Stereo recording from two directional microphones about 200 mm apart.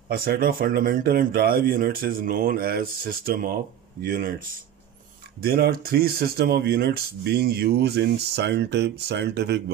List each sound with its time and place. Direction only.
0.1 s speech: 50° right (ahead or behind)
5.4 s speech: 50° right (ahead or behind)